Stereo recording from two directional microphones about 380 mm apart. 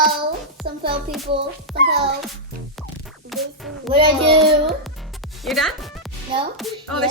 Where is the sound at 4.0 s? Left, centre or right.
Centre.